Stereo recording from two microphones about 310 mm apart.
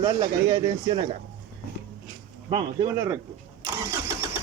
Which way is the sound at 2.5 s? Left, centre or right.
Centre.